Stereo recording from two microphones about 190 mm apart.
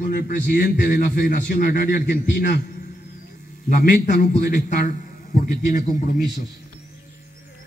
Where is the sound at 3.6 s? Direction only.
45° left (ahead or behind).